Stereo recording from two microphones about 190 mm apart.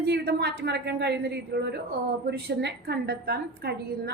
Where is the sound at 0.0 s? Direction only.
60° right (ahead or behind).